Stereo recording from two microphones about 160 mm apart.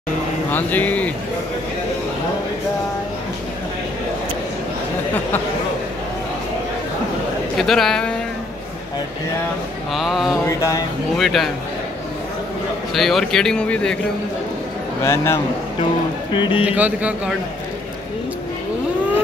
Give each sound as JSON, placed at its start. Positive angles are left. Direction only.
{"t": 0.5, "sound": "speech", "side_deg": 10}
{"t": 7.5, "sound": "speech", "side_deg": 0}
{"t": 9.9, "sound": "speech", "side_deg": 0}
{"t": 10.4, "sound": "a sound", "side_deg": 20}
{"t": 11.1, "sound": "speech", "side_deg": 0}
{"t": 12.9, "sound": "speech", "side_deg": 0}
{"t": 15.0, "sound": "a man's voice", "side_deg": 15}
{"t": 16.3, "sound": "speech", "side_deg": 30}
{"t": 16.6, "sound": "speech", "side_deg": -10}